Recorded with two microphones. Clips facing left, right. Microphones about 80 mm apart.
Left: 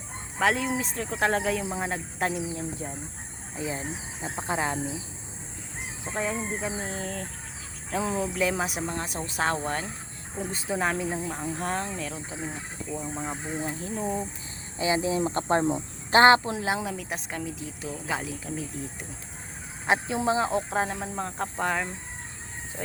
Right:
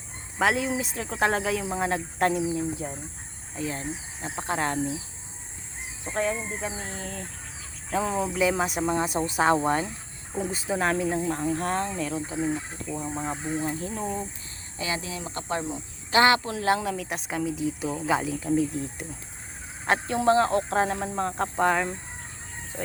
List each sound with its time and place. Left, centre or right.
0.3 s speech: centre
3.6 s speech: centre
6.1 s speech: centre
8.8 s speech: centre
9.6 s speech: centre
10.3 s speech: centre
14.8 s speech: left
16.4 s speech: centre